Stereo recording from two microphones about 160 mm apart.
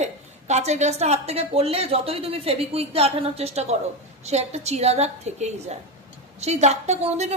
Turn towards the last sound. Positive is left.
turn(degrees=-45)  # may be behind; listen again after turning